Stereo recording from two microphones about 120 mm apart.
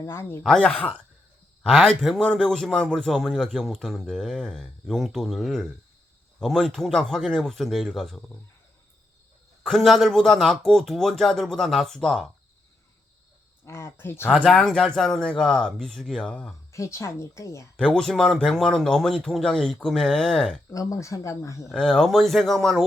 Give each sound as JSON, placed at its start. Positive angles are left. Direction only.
{"t": 0.0, "sound": "speech", "side_deg": 20}
{"t": 0.4, "sound": "a man's voice", "side_deg": 5}
{"t": 9.6, "sound": "a man's voice", "side_deg": 0}
{"t": 13.7, "sound": "speech", "side_deg": 20}
{"t": 14.3, "sound": "a man's voice", "side_deg": 5}
{"t": 16.7, "sound": "speech", "side_deg": 25}
{"t": 17.7, "sound": "a man's voice", "side_deg": 5}
{"t": 20.7, "sound": "speech", "side_deg": 25}
{"t": 21.7, "sound": "a man's voice", "side_deg": 5}